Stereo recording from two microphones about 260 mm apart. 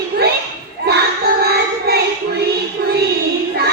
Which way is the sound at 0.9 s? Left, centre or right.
Right.